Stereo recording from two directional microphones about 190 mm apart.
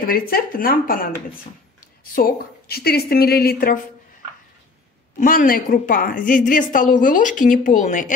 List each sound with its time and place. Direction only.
0.0 s a woman's voice: 50° left (ahead or behind)
2.1 s a woman's voice: 55° left (ahead or behind)
5.2 s a woman's voice: 50° left (ahead or behind)